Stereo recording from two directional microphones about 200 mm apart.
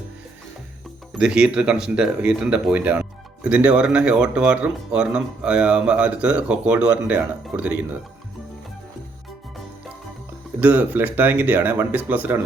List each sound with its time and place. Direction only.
1.2 s speech: 5° right (ahead or behind)
10.6 s speech: 10° right (ahead or behind)